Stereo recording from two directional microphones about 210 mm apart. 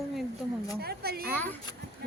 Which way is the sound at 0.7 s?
50° right (ahead or behind).